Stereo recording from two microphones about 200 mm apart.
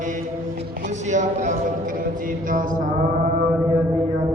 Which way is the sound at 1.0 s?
35° right (ahead or behind).